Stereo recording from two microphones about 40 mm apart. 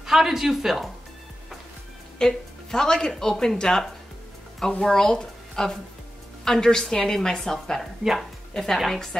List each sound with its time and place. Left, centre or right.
0.0 s speech: centre
2.1 s speech: centre
7.8 s speech: centre
8.2 s a woman's voice: centre